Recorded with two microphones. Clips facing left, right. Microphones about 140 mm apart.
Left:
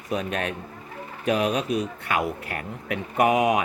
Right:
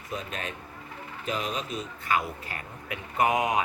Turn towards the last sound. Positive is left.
turn(degrees=70)  # may be behind; listen again after turning